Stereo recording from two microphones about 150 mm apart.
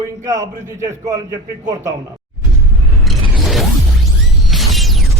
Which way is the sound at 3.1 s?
Centre (ahead or behind).